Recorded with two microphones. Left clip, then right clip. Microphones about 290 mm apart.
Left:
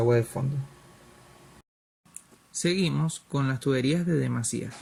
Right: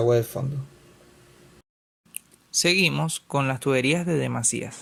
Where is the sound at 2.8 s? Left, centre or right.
Centre.